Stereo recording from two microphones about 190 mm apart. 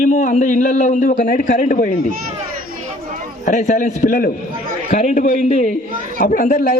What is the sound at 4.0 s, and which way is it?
Speech, 50° left (ahead or behind).